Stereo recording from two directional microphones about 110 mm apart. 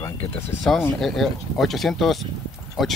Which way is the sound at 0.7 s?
10° left (ahead or behind).